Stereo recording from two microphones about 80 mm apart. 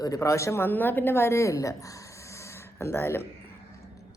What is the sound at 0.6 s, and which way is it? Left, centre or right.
Speech, left.